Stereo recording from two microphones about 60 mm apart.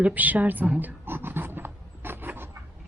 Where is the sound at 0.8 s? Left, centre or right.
Right.